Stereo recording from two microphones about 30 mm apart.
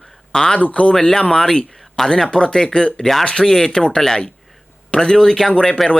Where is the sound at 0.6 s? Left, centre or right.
Left.